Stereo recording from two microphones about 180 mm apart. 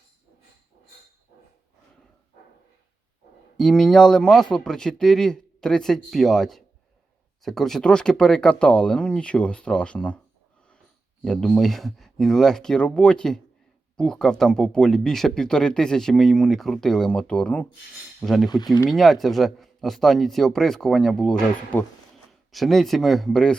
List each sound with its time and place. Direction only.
3.6 s speech: 5° left (ahead or behind)
11.2 s speech: 5° left (ahead or behind)
18.6 s speech: 20° left (ahead or behind)
18.9 s speech: centre (ahead or behind)